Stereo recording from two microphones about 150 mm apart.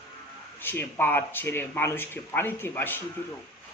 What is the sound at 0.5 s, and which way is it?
Speech, 15° left (ahead or behind).